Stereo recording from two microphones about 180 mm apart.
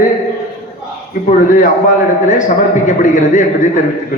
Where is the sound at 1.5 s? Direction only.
45° left (ahead or behind).